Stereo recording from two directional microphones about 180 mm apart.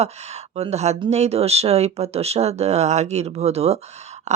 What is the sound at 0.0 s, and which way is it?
Speech, 35° right (ahead or behind).